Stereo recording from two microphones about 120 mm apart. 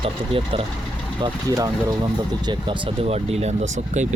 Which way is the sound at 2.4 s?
40° right (ahead or behind).